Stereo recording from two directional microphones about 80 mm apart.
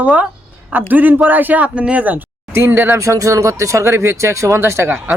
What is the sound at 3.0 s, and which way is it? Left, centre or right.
Speech, right.